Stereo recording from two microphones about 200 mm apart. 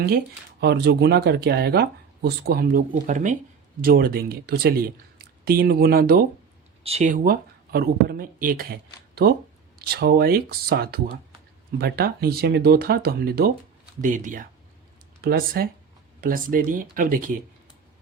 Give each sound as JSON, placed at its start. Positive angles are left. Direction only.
{"t": 0.6, "sound": "speech", "side_deg": -55}
{"t": 6.8, "sound": "speech", "side_deg": -35}